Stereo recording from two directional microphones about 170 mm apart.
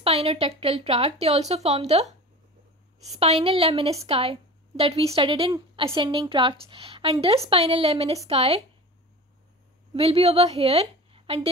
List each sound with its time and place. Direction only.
0.0 s a woman's voice: 35° right (ahead or behind)
3.2 s a woman's voice: 35° right (ahead or behind)
9.9 s a woman's voice: 35° right (ahead or behind)